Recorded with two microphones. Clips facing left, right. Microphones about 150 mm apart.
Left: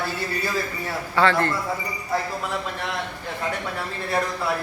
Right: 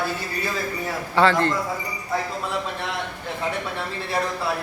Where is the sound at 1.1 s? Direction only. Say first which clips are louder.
Right 2 dB; 20° right (ahead or behind).